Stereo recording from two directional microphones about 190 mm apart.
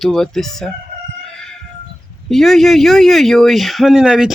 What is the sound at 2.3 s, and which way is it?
Speech, centre (ahead or behind).